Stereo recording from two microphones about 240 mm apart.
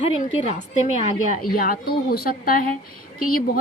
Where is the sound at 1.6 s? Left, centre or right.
Left.